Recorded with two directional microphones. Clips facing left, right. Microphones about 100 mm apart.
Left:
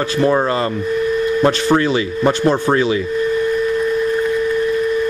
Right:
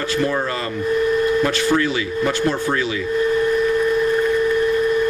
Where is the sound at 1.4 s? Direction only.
35° left (ahead or behind).